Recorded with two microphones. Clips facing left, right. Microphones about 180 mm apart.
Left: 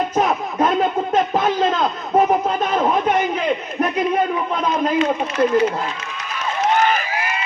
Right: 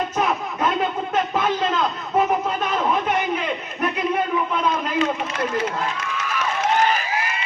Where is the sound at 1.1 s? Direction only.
35° left (ahead or behind).